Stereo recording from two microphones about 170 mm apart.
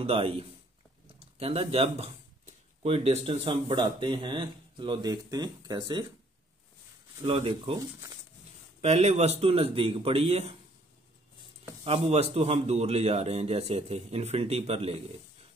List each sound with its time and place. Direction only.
0.0 s a man's voice: 35° right (ahead or behind)
7.2 s a man's voice: 35° right (ahead or behind)
8.8 s a man's voice: 40° right (ahead or behind)
11.8 s a man's voice: 35° right (ahead or behind)